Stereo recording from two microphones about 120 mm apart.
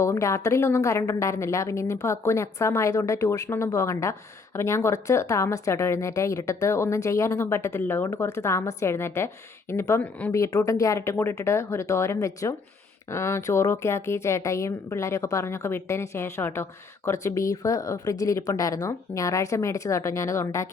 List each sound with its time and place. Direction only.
0.0 s a woman's voice: 25° left (ahead or behind)